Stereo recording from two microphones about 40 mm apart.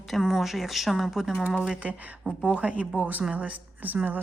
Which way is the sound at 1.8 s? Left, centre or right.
Right.